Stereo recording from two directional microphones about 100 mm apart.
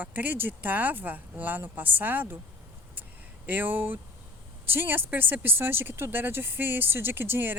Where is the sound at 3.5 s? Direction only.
20° right (ahead or behind).